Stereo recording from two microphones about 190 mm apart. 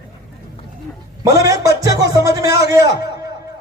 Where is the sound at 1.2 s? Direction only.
15° right (ahead or behind).